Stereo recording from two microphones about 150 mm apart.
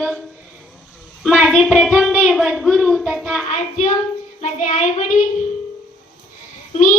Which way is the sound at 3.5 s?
55° left (ahead or behind).